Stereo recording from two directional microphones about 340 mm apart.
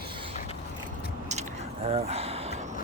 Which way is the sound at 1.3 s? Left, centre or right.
Centre.